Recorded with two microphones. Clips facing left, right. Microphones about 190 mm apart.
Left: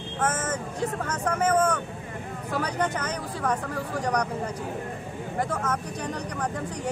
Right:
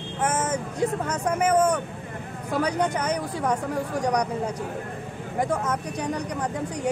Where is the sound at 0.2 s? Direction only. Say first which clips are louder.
Right 2 dB; 10° right (ahead or behind).